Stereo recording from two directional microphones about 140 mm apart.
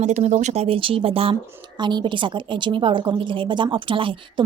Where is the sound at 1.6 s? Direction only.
30° right (ahead or behind).